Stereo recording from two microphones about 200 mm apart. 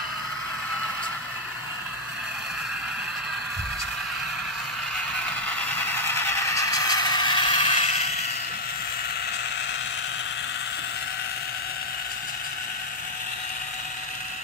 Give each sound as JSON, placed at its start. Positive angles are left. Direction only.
{"t": 5.9, "sound": "vehicle", "side_deg": 10}